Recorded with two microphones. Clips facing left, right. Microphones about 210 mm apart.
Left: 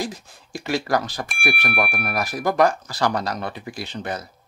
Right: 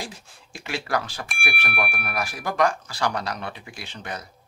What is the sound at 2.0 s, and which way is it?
Speech, 40° left (ahead or behind).